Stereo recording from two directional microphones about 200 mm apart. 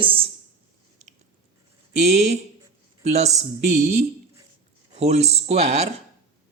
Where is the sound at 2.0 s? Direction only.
35° right (ahead or behind).